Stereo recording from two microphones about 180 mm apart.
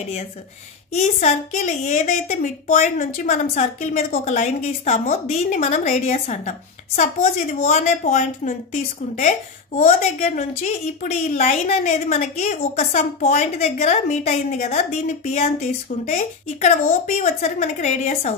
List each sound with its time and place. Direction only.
0.9 s a woman's voice: 40° left (ahead or behind)